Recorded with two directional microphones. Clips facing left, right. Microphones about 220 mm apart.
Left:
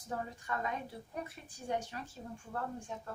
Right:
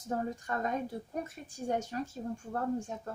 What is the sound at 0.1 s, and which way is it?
A woman's voice, 45° right (ahead or behind).